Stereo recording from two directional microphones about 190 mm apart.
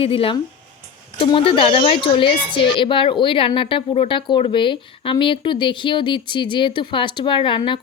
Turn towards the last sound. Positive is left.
turn(degrees=25)  # may be behind; listen again after turning